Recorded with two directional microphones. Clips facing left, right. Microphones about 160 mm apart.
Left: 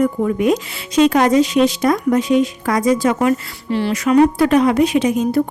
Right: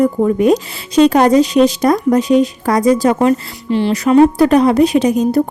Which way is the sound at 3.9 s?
35° right (ahead or behind).